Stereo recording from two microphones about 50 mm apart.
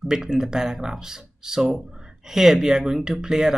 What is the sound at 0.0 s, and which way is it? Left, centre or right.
Speech, centre.